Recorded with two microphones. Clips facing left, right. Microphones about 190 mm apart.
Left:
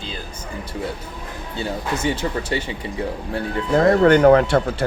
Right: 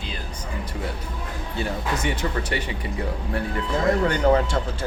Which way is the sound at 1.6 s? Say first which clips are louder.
Left 3 dB; 25° left (ahead or behind).